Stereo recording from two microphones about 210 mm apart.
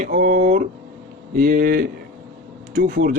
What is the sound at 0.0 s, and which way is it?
A man's voice, 40° right (ahead or behind).